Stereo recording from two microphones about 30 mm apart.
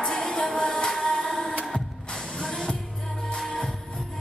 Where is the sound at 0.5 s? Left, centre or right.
Left.